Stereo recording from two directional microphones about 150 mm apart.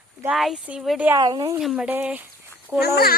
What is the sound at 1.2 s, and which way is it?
Speech, 30° right (ahead or behind).